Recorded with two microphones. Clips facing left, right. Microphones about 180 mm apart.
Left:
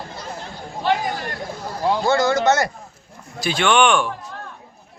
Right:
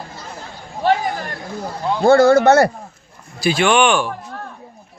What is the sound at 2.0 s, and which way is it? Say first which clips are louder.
Speech: right 10 dB; 55° right (ahead or behind).